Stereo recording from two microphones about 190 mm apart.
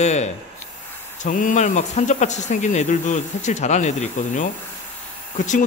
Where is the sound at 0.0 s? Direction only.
35° left (ahead or behind).